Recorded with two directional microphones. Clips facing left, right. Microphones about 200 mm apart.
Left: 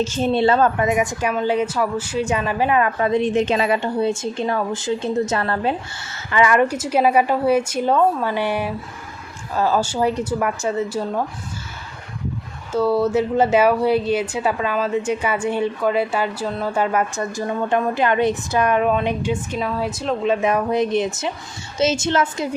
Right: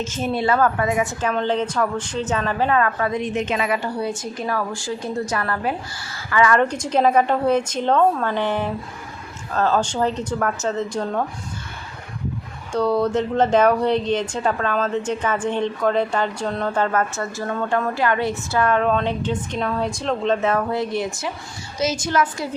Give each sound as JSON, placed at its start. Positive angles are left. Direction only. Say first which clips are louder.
{"t": 0.0, "sound": "speech", "louder": "left 5 dB", "side_deg": 30}
{"t": 6.6, "sound": "speech", "louder": "left 1 dB", "side_deg": 5}
{"t": 12.7, "sound": "speech", "louder": "left 2 dB", "side_deg": 5}